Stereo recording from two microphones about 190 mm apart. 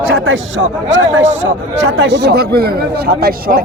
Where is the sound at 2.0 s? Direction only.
65° right (ahead or behind).